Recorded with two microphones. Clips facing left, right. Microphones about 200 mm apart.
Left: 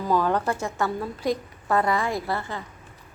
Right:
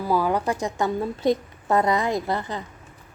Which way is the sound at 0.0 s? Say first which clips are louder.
Right 1 dB; 10° right (ahead or behind).